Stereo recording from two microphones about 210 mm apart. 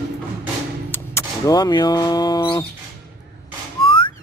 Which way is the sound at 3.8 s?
25° left (ahead or behind).